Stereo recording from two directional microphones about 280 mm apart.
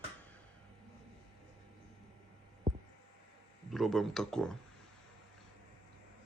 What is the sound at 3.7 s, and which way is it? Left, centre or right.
Speech, centre.